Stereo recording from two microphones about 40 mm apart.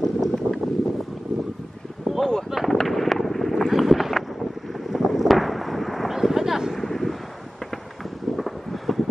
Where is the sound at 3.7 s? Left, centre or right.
Centre.